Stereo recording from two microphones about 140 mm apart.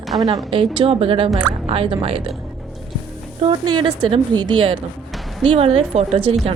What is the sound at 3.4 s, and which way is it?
Speech, 35° right (ahead or behind).